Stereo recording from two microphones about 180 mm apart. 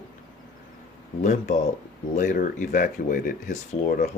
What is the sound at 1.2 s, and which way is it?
Speech, 45° left (ahead or behind).